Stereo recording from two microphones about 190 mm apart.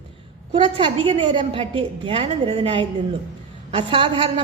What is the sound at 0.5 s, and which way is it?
A woman's voice, 25° right (ahead or behind).